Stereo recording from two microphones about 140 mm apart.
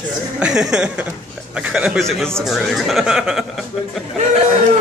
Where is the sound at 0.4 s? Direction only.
5° right (ahead or behind).